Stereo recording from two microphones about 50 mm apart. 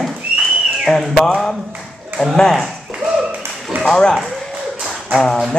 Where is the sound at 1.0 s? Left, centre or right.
Centre.